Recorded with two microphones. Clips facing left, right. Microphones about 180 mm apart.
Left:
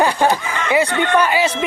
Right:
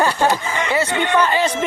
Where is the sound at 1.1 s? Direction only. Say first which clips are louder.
Left 1 dB; 10° left (ahead or behind).